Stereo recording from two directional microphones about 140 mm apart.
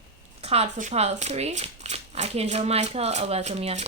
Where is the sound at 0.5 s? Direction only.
50° right (ahead or behind).